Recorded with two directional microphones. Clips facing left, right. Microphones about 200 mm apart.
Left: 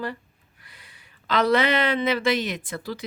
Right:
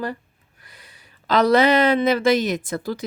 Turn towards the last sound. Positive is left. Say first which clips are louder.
# right 6 dB
turn(degrees=-45)  # may be behind; listen again after turning